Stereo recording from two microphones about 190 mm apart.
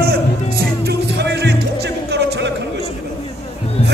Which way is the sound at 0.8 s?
60° right (ahead or behind).